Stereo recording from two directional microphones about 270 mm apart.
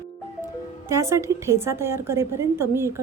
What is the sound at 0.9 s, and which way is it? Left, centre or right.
A woman's voice, centre.